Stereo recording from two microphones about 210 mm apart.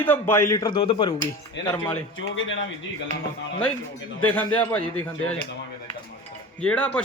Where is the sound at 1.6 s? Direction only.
55° left (ahead or behind).